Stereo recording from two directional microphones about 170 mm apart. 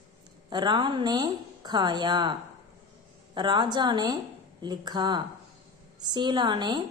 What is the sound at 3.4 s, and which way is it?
A woman's voice, 25° right (ahead or behind).